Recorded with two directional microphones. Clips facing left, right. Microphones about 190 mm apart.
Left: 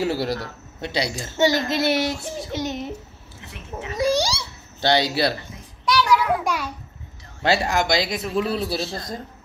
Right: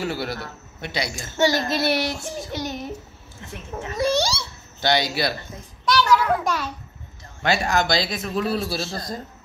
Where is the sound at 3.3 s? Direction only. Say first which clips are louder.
Right 1 dB; 45° right (ahead or behind).